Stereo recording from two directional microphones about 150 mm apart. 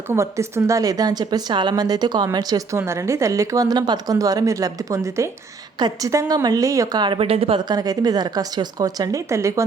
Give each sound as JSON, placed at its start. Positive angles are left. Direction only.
{"t": 0.1, "sound": "a woman's voice", "side_deg": -20}